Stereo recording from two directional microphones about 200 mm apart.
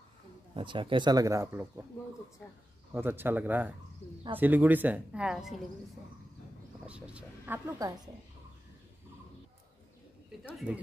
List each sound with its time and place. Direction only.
0.6 s speech: 25° right (ahead or behind)
2.9 s speech: 10° right (ahead or behind)
6.9 s speech: 5° right (ahead or behind)
10.7 s speech: 5° right (ahead or behind)